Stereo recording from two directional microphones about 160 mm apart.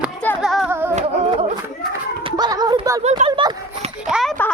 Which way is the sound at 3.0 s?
45° right (ahead or behind).